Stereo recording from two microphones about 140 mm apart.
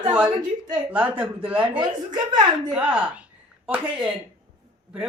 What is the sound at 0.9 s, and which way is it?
Speech, 10° right (ahead or behind).